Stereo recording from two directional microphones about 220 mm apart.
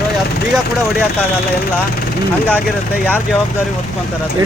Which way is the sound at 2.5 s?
10° right (ahead or behind).